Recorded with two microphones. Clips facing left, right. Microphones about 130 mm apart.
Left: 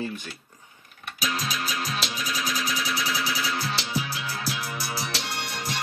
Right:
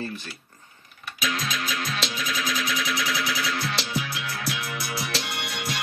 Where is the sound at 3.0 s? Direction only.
30° left (ahead or behind).